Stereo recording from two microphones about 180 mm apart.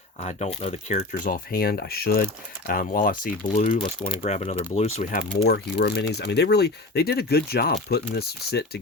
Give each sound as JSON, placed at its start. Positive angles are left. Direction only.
{"t": 0.2, "sound": "speech", "side_deg": 40}
{"t": 1.2, "sound": "speech", "side_deg": 55}
{"t": 5.3, "sound": "speech", "side_deg": 60}